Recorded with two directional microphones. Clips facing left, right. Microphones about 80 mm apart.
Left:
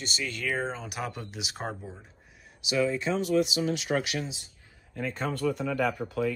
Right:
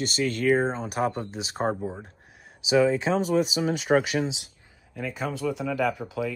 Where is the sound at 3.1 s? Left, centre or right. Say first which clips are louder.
Right 4 dB; right.